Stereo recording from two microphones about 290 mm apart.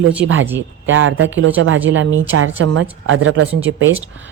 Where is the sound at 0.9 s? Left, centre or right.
Right.